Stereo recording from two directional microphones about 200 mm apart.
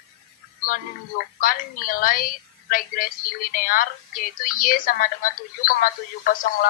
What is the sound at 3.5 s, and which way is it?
Speech, 45° left (ahead or behind).